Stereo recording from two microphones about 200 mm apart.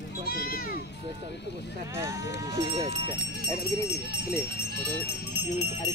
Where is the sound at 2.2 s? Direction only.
60° left (ahead or behind).